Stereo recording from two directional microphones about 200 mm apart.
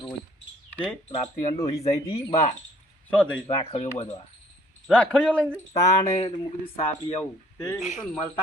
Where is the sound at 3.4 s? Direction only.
30° left (ahead or behind).